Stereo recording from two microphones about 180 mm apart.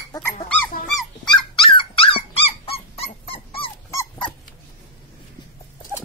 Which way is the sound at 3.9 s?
15° left (ahead or behind).